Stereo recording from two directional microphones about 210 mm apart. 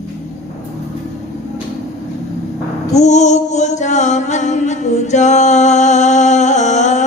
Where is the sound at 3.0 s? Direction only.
35° left (ahead or behind).